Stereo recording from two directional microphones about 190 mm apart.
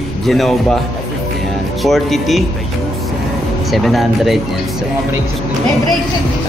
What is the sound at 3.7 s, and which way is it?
Speech, centre (ahead or behind).